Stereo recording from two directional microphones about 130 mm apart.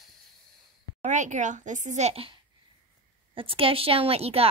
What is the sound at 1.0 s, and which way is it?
A woman's voice, 70° right (ahead or behind).